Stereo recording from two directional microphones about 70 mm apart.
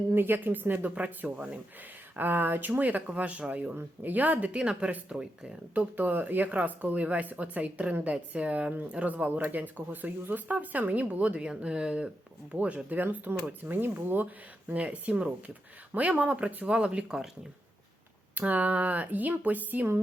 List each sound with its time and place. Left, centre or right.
0.1 s speech: right; by 17.2 s centre
18.3 s speech: right